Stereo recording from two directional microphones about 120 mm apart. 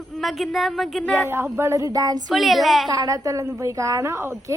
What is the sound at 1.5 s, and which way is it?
Speech, 25° right (ahead or behind).